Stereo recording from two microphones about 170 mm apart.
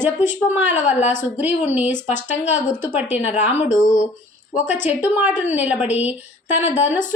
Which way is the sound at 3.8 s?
45° left (ahead or behind).